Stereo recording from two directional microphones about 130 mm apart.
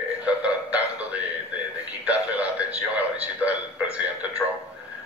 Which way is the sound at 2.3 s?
10° right (ahead or behind).